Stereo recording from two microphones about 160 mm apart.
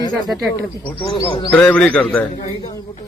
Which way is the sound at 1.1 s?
30° left (ahead or behind).